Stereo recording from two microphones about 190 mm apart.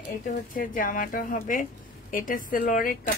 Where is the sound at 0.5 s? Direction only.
45° left (ahead or behind).